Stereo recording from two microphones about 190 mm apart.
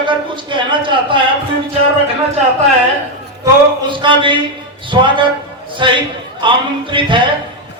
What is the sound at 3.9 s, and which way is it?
A man's voice, 25° right (ahead or behind).